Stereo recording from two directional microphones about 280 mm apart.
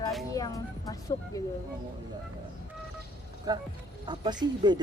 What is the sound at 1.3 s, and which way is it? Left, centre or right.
Speech, centre.